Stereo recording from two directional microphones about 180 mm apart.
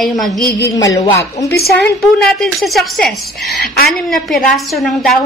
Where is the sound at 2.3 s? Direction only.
Centre (ahead or behind).